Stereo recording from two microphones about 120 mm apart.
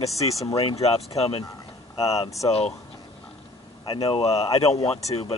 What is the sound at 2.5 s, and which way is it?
Speech, 60° left (ahead or behind).